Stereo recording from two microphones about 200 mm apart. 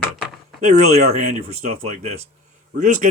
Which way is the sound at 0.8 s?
35° right (ahead or behind).